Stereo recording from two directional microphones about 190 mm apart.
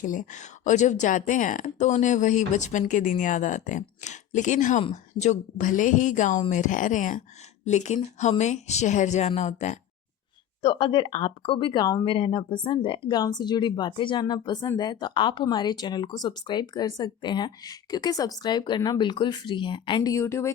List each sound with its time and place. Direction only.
0.0 s a woman's voice: 45° left (ahead or behind)
10.6 s speech: 25° left (ahead or behind)